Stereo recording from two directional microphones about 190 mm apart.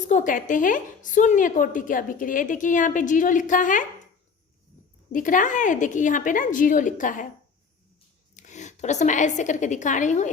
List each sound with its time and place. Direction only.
0.1 s a woman's voice: 40° left (ahead or behind)
5.1 s a woman's voice: 45° left (ahead or behind)
8.4 s a woman's voice: 40° left (ahead or behind)